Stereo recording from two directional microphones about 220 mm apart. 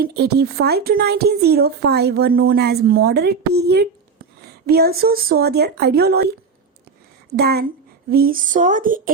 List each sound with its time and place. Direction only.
0.0 s speech: 45° right (ahead or behind)
7.3 s speech: 45° right (ahead or behind)